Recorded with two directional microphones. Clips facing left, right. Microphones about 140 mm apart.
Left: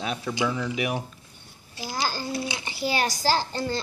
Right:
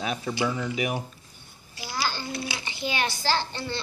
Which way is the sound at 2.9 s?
40° left (ahead or behind).